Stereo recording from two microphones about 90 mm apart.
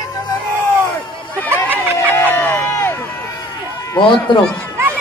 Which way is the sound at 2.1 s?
25° left (ahead or behind).